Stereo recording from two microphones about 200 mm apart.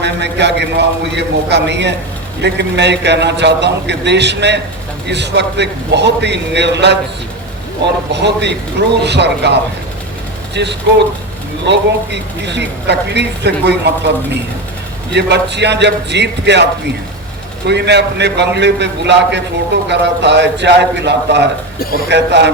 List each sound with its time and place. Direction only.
0.0 s a man's voice: 60° right (ahead or behind)
10.5 s a man's voice: 60° right (ahead or behind)
15.1 s a man's voice: 60° right (ahead or behind)
17.7 s a man's voice: 60° right (ahead or behind)